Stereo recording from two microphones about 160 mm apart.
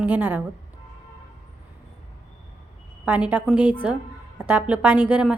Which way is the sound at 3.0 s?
10° right (ahead or behind).